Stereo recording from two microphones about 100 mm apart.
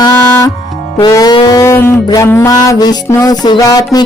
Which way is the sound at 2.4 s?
40° left (ahead or behind).